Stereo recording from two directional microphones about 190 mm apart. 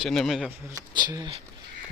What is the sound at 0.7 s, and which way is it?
Speech, 20° right (ahead or behind).